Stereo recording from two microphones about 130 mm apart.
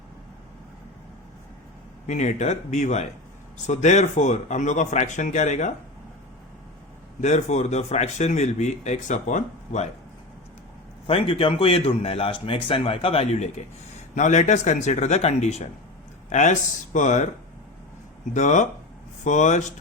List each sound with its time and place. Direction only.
2.0 s speech: 70° left (ahead or behind)
7.2 s speech: 65° left (ahead or behind)
11.0 s speech: 45° left (ahead or behind)
14.2 s speech: 65° left (ahead or behind)
18.3 s speech: 70° left (ahead or behind)